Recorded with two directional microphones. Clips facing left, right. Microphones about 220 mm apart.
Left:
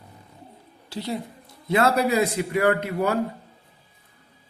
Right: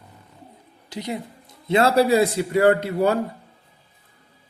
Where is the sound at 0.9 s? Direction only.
15° right (ahead or behind).